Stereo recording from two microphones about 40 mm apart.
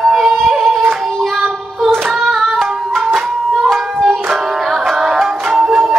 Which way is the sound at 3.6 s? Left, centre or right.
Centre.